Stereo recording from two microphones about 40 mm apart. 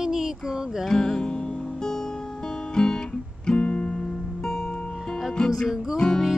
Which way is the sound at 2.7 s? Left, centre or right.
Centre.